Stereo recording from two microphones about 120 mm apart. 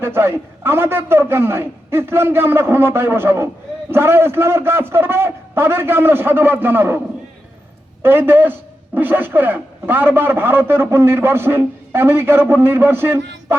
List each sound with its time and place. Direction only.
0.0 s a man's voice: 20° right (ahead or behind)
8.0 s a man's voice: 20° right (ahead or behind)